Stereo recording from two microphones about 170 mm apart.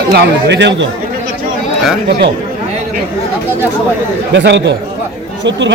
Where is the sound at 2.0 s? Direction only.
75° right (ahead or behind).